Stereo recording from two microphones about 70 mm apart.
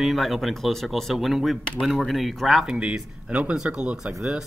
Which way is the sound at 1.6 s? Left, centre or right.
Centre.